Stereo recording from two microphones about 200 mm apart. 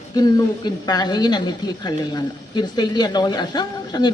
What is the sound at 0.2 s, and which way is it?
A man's voice, 20° left (ahead or behind).